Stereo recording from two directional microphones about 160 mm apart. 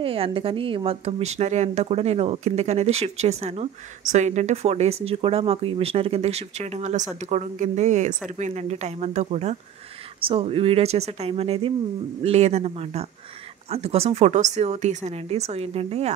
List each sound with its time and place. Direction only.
0.0 s a woman's voice: 35° right (ahead or behind)